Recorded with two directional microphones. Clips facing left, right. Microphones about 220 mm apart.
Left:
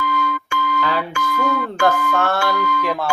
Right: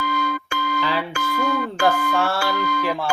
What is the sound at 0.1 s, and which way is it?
Music, 40° right (ahead or behind).